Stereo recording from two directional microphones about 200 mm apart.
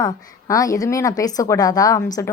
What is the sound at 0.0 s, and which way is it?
A woman's voice, 15° left (ahead or behind).